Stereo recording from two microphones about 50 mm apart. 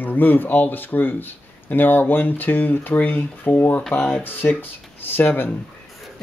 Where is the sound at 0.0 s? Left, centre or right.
Left.